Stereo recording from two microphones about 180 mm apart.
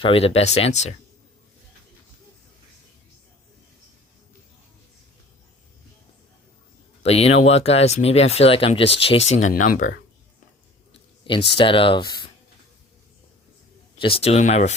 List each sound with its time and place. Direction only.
0.0 s speech: 30° left (ahead or behind)
7.0 s speech: 35° left (ahead or behind); by 9.9 s 50° left (ahead or behind)
11.2 s speech: 25° left (ahead or behind)
14.0 s speech: 30° left (ahead or behind)